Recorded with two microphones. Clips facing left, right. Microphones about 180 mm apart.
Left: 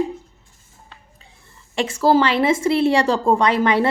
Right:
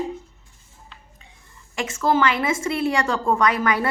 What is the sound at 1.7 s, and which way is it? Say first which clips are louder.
A woman's voice: left 5 dB; 30° left (ahead or behind).